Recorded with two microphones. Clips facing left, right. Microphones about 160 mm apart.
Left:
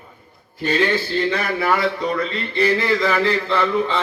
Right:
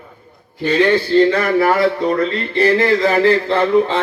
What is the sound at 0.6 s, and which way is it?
Speech, 60° right (ahead or behind).